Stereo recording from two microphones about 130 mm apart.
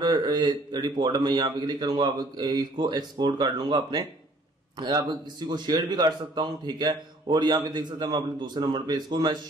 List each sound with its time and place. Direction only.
0.0 s speech: 35° right (ahead or behind)